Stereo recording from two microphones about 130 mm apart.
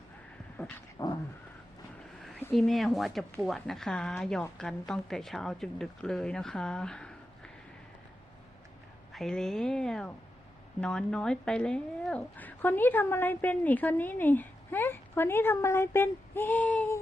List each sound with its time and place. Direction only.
0.5 s dog: 10° left (ahead or behind)
0.9 s cat: 30° left (ahead or behind)
2.5 s speech: centre (ahead or behind)
9.1 s speech: 5° left (ahead or behind)